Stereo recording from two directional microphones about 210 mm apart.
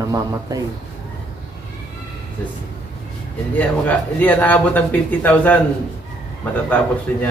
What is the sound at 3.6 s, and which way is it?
Speech, 5° left (ahead or behind).